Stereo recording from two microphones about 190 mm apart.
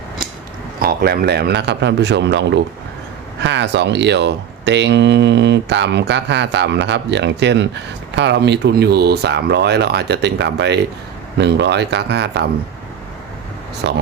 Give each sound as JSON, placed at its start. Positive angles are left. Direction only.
{"t": 0.8, "sound": "speech", "side_deg": -55}
{"t": 3.4, "sound": "speech", "side_deg": -70}